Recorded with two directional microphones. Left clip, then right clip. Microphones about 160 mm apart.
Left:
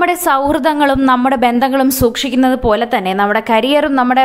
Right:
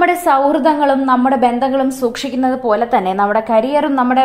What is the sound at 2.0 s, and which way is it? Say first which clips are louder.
Speech: left 4 dB; 20° left (ahead or behind).